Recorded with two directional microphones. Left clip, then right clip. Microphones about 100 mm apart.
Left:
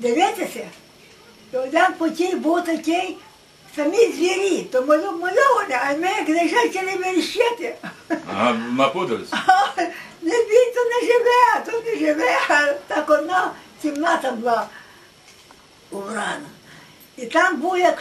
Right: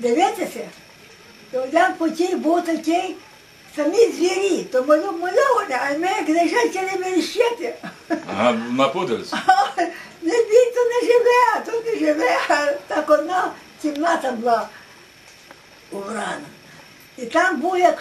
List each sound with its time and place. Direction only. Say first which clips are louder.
0.0 s speech: even; centre (ahead or behind)
8.9 s speech: right 1 dB; 20° right (ahead or behind)
9.3 s speech: left 1 dB; centre (ahead or behind)
15.9 s speech: left 1 dB; centre (ahead or behind)